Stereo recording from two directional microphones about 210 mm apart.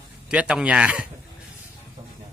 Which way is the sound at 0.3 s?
5° right (ahead or behind).